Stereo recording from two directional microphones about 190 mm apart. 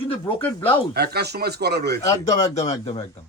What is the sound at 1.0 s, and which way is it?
Speech, 55° right (ahead or behind).